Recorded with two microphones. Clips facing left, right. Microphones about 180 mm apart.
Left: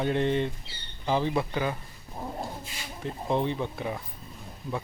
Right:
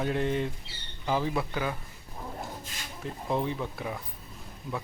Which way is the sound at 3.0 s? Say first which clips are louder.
Left 3 dB; 5° right (ahead or behind).